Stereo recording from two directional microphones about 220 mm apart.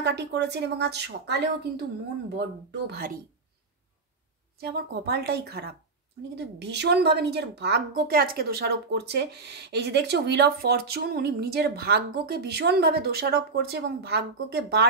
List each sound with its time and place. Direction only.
0.0 s a woman's voice: 50° right (ahead or behind)
4.6 s a woman's voice: 45° right (ahead or behind)